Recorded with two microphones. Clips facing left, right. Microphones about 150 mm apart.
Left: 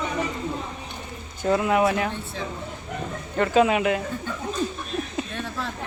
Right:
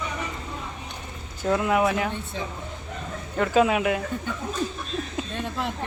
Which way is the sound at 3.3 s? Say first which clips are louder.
Left 1 dB; centre (ahead or behind).